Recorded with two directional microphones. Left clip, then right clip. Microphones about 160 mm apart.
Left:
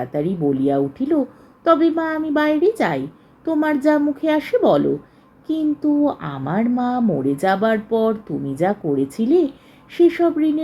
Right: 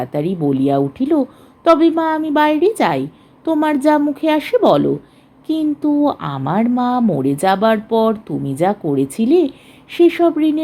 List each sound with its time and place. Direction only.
0.0 s speech: 50° right (ahead or behind)